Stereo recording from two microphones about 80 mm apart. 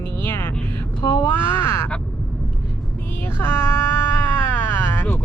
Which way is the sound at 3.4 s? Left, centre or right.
Left.